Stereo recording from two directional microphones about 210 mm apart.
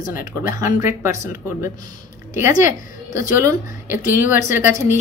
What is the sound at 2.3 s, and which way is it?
A woman's voice, 10° right (ahead or behind).